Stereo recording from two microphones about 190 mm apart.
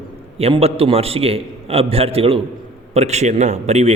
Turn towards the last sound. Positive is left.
turn(degrees=-35)  # may be behind; listen again after turning